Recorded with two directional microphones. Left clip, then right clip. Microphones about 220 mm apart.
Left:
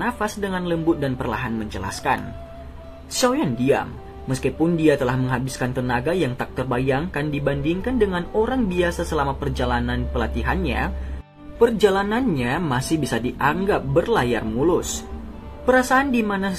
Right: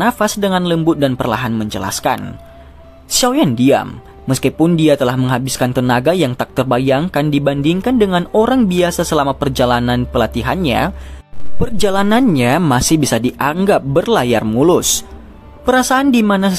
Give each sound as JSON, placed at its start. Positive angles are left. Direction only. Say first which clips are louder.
{"t": 0.0, "sound": "speech", "louder": "right 10 dB", "side_deg": -50}